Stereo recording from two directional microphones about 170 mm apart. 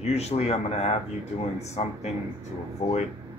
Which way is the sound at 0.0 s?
40° left (ahead or behind).